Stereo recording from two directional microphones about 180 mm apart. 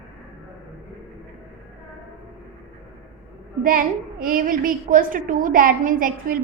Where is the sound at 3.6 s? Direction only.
50° right (ahead or behind).